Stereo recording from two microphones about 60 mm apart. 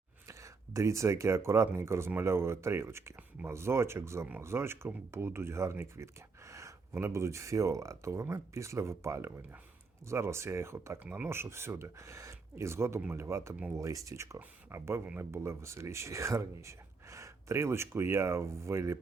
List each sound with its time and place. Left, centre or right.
0.3 s speech: right
5.7 s a sound: right
6.9 s speech: right
13.7 s speech: right
14.7 s speech: right